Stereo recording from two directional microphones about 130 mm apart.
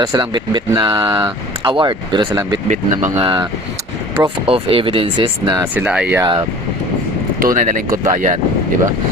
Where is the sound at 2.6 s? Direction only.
65° right (ahead or behind).